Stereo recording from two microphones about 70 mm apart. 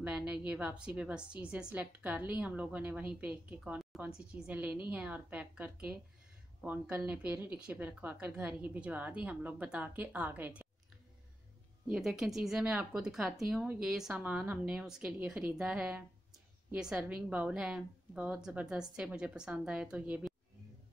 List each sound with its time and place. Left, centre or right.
0.0 s a woman's voice: centre
11.9 s a woman's voice: centre
14.1 s a woman's voice: right